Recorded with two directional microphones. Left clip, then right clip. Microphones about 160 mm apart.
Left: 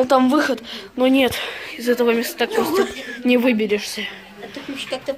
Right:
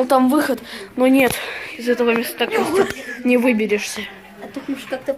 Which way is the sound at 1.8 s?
Centre (ahead or behind).